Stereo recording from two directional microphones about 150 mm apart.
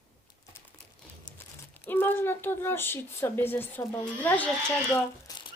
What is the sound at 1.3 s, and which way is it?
A child's voice, 15° left (ahead or behind).